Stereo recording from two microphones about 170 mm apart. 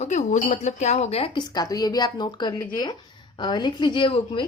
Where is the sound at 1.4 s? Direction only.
25° left (ahead or behind).